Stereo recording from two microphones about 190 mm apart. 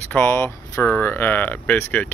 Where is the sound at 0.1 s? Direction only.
10° left (ahead or behind).